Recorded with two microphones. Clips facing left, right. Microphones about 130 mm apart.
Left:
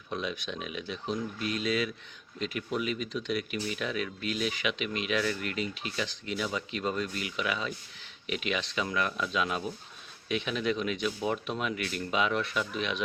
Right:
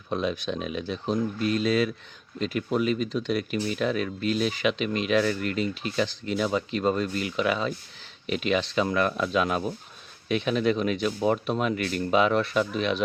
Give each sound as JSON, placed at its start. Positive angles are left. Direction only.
{"t": 0.1, "sound": "speech", "side_deg": -35}